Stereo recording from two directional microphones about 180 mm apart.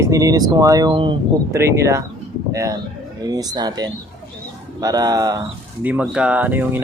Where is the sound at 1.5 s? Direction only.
15° right (ahead or behind).